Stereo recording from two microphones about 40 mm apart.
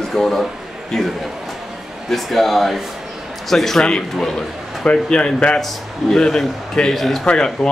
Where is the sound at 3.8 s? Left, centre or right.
Left.